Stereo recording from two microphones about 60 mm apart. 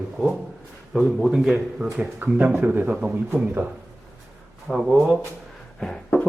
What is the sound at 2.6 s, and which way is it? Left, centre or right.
Speech, right.